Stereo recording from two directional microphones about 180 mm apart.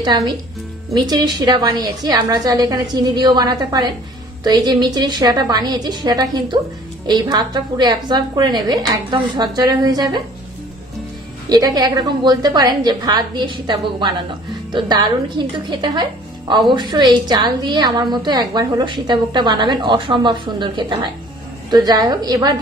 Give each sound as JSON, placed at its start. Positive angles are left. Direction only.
{"t": 0.0, "sound": "a woman's voice", "side_deg": -25}
{"t": 11.4, "sound": "a woman's voice", "side_deg": -20}